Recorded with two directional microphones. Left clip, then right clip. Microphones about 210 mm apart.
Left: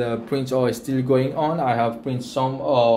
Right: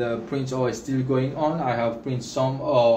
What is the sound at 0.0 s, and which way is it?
Speech, 50° left (ahead or behind).